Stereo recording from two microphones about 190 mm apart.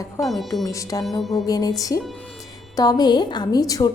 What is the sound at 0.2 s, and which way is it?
Speech, centre (ahead or behind).